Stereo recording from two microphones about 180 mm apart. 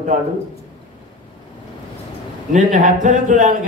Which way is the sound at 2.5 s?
45° right (ahead or behind).